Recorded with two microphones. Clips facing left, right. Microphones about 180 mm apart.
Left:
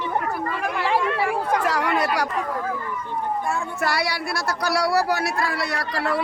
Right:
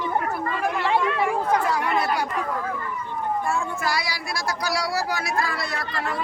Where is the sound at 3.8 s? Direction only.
65° left (ahead or behind).